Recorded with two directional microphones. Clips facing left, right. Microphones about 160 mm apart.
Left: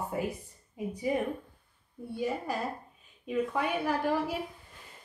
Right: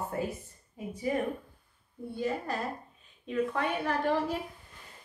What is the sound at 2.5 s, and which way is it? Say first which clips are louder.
Speech: left 1 dB; 10° left (ahead or behind).